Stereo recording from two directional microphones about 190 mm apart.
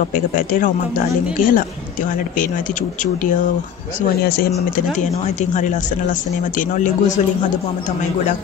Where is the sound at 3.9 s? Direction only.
55° left (ahead or behind).